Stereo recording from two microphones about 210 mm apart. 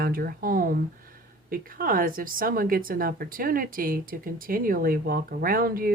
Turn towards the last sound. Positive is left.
turn(degrees=-45)  # may be behind; listen again after turning